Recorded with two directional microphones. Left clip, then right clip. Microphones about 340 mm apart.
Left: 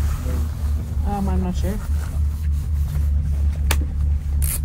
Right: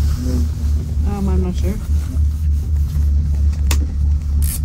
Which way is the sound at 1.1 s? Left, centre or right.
Left.